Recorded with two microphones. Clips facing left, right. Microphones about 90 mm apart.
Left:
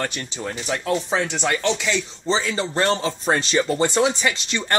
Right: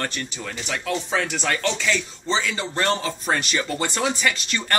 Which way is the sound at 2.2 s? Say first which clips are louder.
Left 3 dB; 30° left (ahead or behind).